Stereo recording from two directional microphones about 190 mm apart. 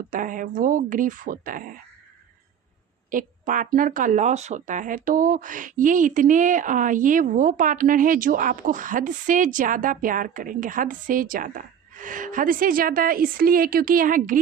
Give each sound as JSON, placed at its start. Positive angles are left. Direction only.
{"t": 0.1, "sound": "speech", "side_deg": -45}
{"t": 3.1, "sound": "speech", "side_deg": -45}